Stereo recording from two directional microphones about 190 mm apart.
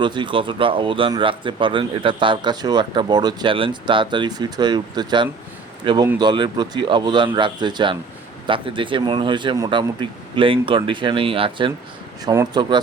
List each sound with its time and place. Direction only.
0.0 s speech: 25° right (ahead or behind)